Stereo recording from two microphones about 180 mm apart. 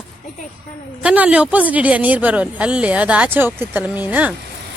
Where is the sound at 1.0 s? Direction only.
10° right (ahead or behind).